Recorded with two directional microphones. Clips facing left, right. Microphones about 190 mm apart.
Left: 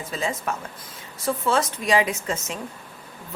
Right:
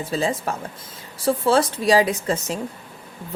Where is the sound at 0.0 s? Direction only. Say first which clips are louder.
Right 5 dB; 35° right (ahead or behind).